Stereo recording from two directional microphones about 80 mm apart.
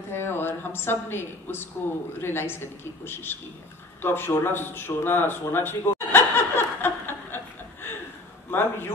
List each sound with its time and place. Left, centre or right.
0.1 s a woman's voice: left
4.0 s a sound: left
8.5 s a man's voice: left